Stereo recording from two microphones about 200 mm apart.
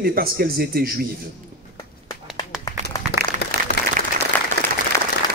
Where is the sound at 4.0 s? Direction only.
40° right (ahead or behind).